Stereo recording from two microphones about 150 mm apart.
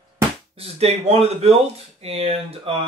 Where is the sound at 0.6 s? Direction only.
45° right (ahead or behind).